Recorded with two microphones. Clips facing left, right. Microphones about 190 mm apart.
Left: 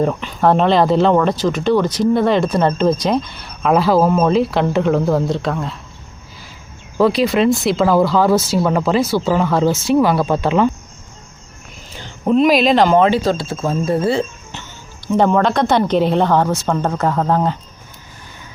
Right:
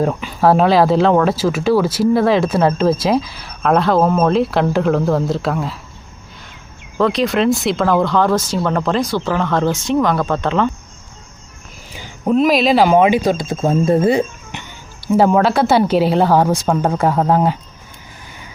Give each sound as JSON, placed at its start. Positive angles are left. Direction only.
{"t": 0.0, "sound": "speech", "side_deg": -5}
{"t": 7.0, "sound": "speech", "side_deg": 5}
{"t": 11.9, "sound": "speech", "side_deg": -5}